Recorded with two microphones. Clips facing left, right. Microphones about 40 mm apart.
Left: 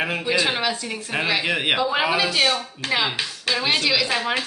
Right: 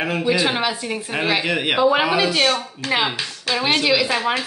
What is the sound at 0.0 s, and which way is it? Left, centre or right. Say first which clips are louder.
Speech: right 3 dB; centre.